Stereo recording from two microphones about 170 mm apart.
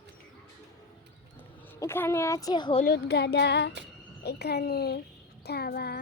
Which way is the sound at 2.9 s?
75° left (ahead or behind).